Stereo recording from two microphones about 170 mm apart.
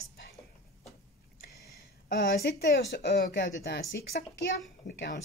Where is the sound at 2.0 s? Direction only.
70° left (ahead or behind).